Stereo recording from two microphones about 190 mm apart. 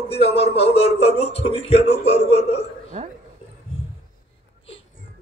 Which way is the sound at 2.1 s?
30° left (ahead or behind).